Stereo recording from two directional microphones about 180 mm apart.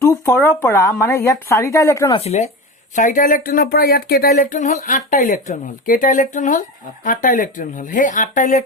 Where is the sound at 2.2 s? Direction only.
35° left (ahead or behind).